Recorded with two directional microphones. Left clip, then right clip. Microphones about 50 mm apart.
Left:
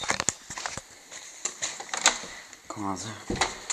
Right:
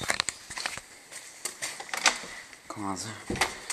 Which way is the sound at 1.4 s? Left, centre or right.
Centre.